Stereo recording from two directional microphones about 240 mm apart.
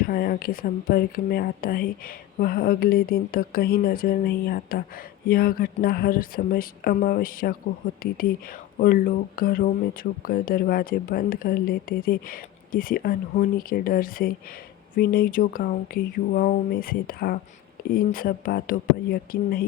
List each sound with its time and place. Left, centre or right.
0.0 s speech: left